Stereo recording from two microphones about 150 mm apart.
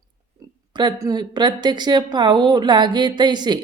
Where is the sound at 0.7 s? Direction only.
25° right (ahead or behind).